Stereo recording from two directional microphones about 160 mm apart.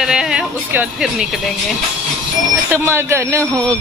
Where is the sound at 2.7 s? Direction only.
15° right (ahead or behind).